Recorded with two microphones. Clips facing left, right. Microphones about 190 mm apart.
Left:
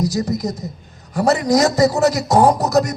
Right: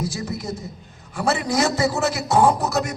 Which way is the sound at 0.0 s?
40° left (ahead or behind).